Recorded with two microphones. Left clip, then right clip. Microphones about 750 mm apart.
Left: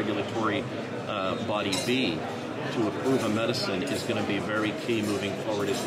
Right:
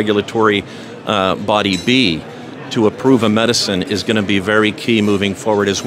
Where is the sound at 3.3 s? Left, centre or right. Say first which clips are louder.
Right 13 dB; right.